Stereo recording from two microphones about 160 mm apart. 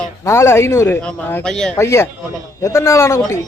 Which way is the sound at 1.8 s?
15° left (ahead or behind).